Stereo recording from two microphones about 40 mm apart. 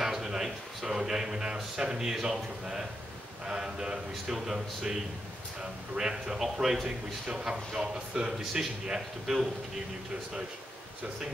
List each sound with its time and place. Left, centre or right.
0.0 s speech: centre
7.2 s speech: right